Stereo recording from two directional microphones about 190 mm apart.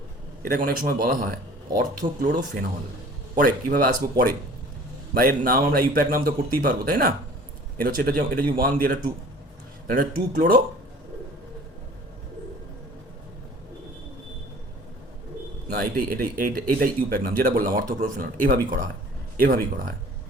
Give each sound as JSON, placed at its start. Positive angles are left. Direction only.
{"t": 0.4, "sound": "speech", "side_deg": -50}
{"t": 3.3, "sound": "speech", "side_deg": -45}
{"t": 5.1, "sound": "speech", "side_deg": -50}
{"t": 15.7, "sound": "speech", "side_deg": -50}